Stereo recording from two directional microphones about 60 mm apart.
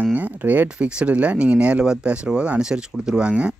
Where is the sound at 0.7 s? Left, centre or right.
Centre.